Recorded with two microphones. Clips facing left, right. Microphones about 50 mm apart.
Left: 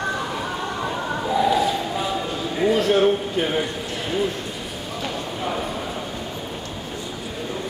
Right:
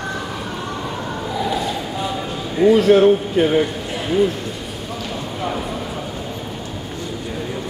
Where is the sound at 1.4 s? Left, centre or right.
Centre.